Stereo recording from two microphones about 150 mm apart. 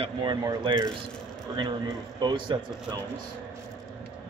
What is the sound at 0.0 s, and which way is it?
Speech, 30° right (ahead or behind).